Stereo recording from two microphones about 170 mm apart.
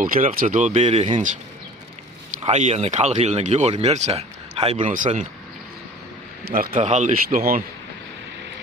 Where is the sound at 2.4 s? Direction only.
45° right (ahead or behind).